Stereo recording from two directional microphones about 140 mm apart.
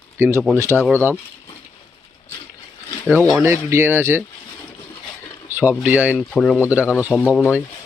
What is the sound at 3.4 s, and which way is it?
Speech, 20° right (ahead or behind).